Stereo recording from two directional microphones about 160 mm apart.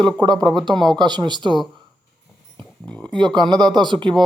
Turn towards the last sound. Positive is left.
turn(degrees=-30)  # may be behind; listen again after turning